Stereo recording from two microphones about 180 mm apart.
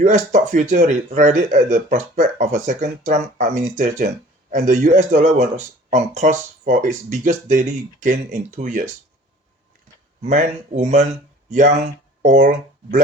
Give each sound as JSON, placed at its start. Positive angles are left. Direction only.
{"t": 0.0, "sound": "speech", "side_deg": -40}
{"t": 10.2, "sound": "speech", "side_deg": -40}